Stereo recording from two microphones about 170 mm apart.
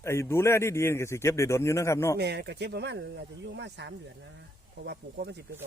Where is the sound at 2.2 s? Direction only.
75° right (ahead or behind).